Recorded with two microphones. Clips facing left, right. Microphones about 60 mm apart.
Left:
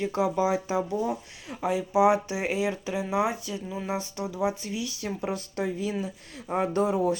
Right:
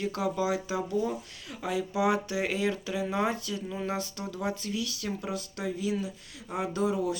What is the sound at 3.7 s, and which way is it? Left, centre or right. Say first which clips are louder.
Speech: left 2 dB; centre.